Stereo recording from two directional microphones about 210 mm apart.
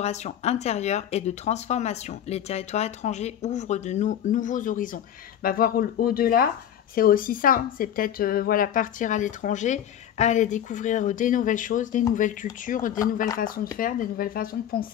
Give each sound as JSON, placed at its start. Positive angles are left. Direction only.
{"t": 0.0, "sound": "speech", "side_deg": 30}